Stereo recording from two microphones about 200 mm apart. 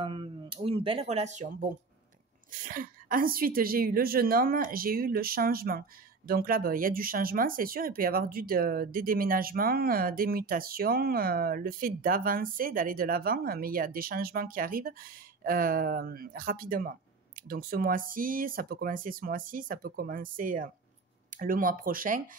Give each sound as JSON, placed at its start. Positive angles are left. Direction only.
{"t": 0.0, "sound": "a woman's voice", "side_deg": -25}